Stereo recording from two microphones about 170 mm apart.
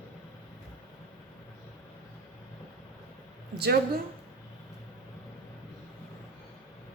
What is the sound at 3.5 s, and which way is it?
Speech, 70° right (ahead or behind).